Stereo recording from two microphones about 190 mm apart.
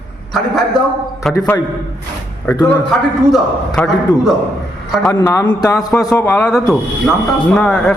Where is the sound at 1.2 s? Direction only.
Centre (ahead or behind).